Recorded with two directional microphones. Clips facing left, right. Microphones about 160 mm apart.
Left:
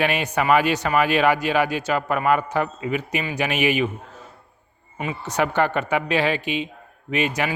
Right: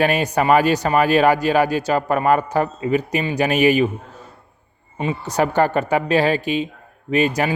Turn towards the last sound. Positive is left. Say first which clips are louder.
# right 5 dB
turn(degrees=-40)  # may be behind; listen again after turning